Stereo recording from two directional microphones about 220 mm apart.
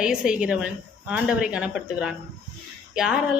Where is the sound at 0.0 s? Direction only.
5° right (ahead or behind).